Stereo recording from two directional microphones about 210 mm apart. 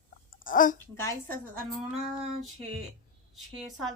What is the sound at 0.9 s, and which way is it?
Speech, 10° left (ahead or behind).